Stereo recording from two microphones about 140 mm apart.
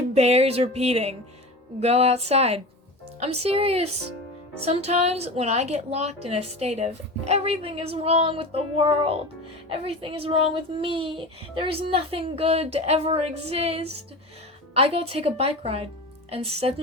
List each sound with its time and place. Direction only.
0.1 s a woman's voice: 50° right (ahead or behind)